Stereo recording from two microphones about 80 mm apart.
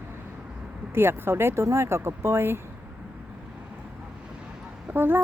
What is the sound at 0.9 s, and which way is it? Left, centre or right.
Speech, right.